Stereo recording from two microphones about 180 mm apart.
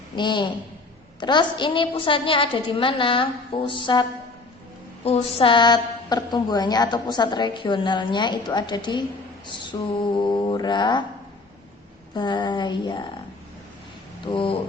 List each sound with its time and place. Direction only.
0.2 s a woman's voice: 25° left (ahead or behind)
5.0 s a woman's voice: 35° left (ahead or behind)
12.1 s a woman's voice: 25° left (ahead or behind)
14.3 s a woman's voice: 30° left (ahead or behind)